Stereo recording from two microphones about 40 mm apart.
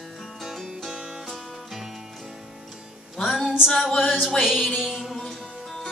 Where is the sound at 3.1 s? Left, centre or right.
Centre.